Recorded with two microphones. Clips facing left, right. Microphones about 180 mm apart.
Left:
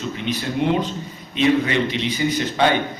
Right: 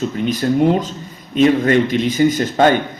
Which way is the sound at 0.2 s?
45° right (ahead or behind).